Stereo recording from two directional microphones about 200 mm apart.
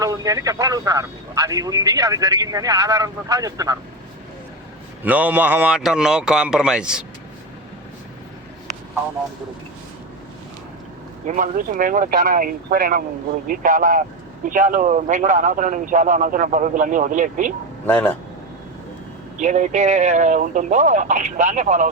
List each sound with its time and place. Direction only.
0.0 s speech: 15° right (ahead or behind)
5.0 s speech: 10° right (ahead or behind)
11.3 s a man's voice: 40° right (ahead or behind)
17.8 s speech: 5° left (ahead or behind)
19.4 s a man's voice: 35° right (ahead or behind)